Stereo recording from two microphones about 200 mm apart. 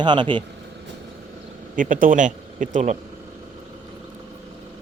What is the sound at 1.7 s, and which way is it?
Speech, 40° right (ahead or behind).